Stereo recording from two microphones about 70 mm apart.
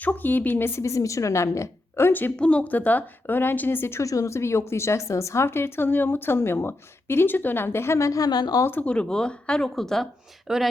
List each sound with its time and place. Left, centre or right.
0.0 s a woman's voice: left
0.8 s a woman's voice: left
2.3 s a woman's voice: centre; by 4.0 s left
4.0 s a woman's voice: left
8.3 s speech: left
8.8 s speech: centre
10.4 s speech: centre